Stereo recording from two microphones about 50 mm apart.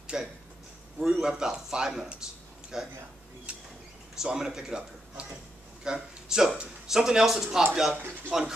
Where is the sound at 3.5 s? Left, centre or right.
Right.